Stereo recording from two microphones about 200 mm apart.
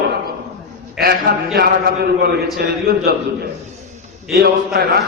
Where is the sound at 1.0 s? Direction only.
50° right (ahead or behind).